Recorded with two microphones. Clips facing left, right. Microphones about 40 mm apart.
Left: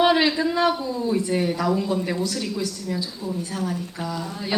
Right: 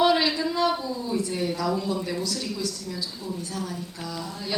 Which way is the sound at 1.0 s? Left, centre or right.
Left.